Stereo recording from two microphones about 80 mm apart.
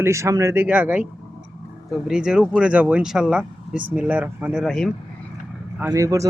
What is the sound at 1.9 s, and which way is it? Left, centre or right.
Speech, centre.